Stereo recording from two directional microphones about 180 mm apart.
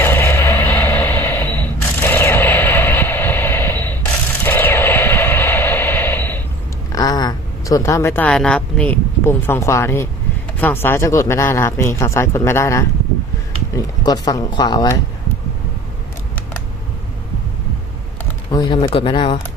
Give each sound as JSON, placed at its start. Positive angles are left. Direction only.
{"t": 0.0, "sound": "a sound", "side_deg": 10}
{"t": 6.9, "sound": "speech", "side_deg": 20}
{"t": 18.5, "sound": "speech", "side_deg": 25}